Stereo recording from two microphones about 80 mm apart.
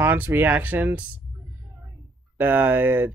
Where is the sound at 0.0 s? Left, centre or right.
Right.